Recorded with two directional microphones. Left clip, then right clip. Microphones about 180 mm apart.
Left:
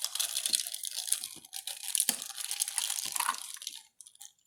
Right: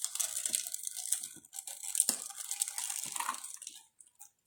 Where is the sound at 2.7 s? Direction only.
25° left (ahead or behind).